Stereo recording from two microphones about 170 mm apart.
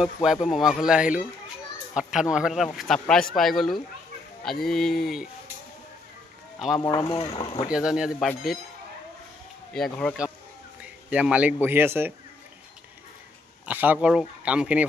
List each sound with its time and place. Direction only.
0.0 s speech: 5° right (ahead or behind)
6.8 s speech: 20° left (ahead or behind)
7.7 s speech: 5° right (ahead or behind)
9.8 s speech: 5° left (ahead or behind)
10.8 s a sound: 5° right (ahead or behind)
11.6 s speech: 15° right (ahead or behind)
13.7 s speech: 10° right (ahead or behind)